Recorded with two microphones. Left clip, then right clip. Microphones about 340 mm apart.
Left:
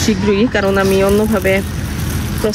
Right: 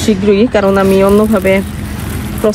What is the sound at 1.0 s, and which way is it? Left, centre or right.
Speech, right.